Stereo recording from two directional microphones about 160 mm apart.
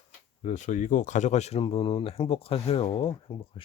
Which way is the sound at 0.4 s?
50° left (ahead or behind).